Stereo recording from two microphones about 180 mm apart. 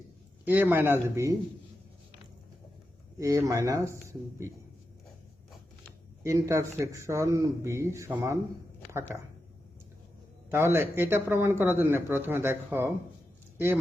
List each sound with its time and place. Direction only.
0.4 s speech: 10° right (ahead or behind)
3.2 s speech: 20° right (ahead or behind)
6.2 s speech: 15° right (ahead or behind)
10.5 s speech: 15° right (ahead or behind)